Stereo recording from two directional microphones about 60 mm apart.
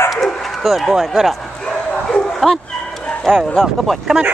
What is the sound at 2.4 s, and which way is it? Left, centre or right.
Speech, centre.